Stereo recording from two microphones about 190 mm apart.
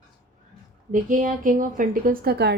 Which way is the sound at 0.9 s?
45° right (ahead or behind).